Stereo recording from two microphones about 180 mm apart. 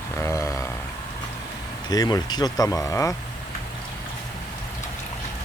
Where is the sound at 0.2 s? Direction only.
15° left (ahead or behind).